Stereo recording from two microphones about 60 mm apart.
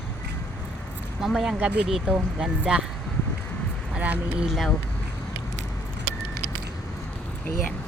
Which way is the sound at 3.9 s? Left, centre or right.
Right.